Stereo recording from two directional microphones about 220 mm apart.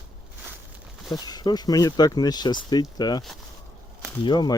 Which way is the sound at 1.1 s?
20° left (ahead or behind).